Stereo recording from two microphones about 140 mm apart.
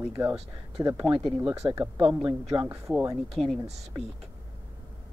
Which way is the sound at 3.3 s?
Centre (ahead or behind).